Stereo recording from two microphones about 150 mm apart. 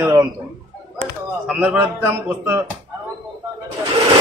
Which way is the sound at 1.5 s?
10° right (ahead or behind).